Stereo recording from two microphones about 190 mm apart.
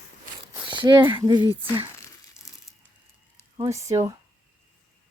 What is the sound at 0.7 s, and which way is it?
Speech, 25° right (ahead or behind).